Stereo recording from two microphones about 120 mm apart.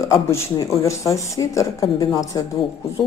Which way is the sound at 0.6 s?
25° left (ahead or behind).